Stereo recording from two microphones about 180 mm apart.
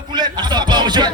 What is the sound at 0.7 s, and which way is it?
Music, 25° right (ahead or behind).